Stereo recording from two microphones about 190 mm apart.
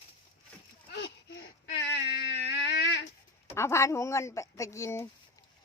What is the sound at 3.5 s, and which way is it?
A woman's voice, 15° left (ahead or behind).